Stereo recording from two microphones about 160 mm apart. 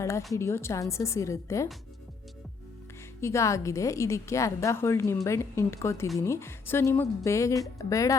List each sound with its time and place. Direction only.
0.3 s a woman's voice: 15° left (ahead or behind)
3.2 s a woman's voice: 15° left (ahead or behind)